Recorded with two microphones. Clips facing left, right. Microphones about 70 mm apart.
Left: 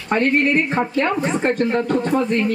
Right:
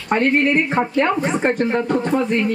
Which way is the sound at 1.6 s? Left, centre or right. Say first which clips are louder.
Even; centre.